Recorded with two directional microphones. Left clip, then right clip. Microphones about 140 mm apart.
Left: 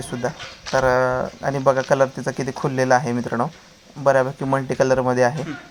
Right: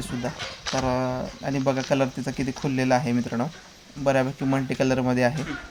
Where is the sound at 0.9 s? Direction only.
20° left (ahead or behind).